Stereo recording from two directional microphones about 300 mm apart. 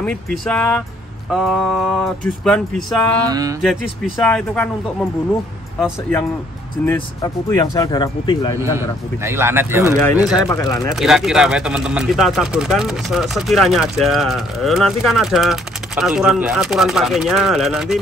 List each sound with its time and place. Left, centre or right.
0.5 s speech: centre
3.3 s speech: centre
3.6 s speech: centre
5.8 s speech: centre
8.7 s speech: centre
10.3 s speech: centre
11.0 s speech: centre